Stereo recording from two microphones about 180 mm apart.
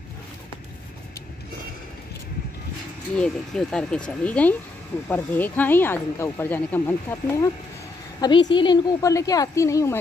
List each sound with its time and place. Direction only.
3.2 s speech: 5° left (ahead or behind)
8.2 s a woman's voice: 25° left (ahead or behind)